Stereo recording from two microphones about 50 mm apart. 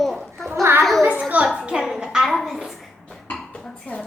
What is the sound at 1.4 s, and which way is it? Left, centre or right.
A woman's voice, centre.